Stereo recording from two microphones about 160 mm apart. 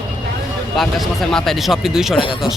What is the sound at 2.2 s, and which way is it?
Speech, 30° left (ahead or behind).